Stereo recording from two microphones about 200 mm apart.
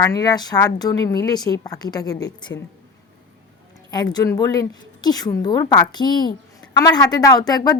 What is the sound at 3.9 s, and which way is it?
A woman's voice, 20° left (ahead or behind).